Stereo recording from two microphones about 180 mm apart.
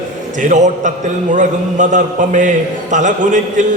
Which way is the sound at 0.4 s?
45° right (ahead or behind).